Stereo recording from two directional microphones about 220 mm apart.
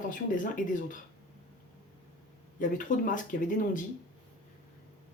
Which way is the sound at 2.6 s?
35° left (ahead or behind).